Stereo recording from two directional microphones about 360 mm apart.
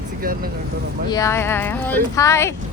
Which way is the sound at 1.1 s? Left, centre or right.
Centre.